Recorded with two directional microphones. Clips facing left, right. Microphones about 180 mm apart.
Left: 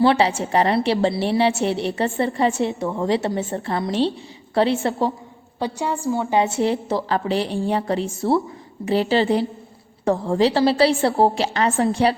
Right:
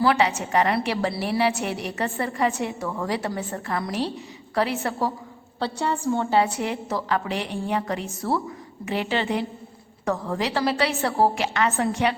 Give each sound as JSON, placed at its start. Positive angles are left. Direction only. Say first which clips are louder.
{"t": 0.0, "sound": "a woman's voice", "louder": "left 4 dB", "side_deg": 30}
{"t": 5.5, "sound": "a woman's voice", "louder": "left 2 dB", "side_deg": 10}
{"t": 6.4, "sound": "a woman's voice", "louder": "left 5 dB", "side_deg": 30}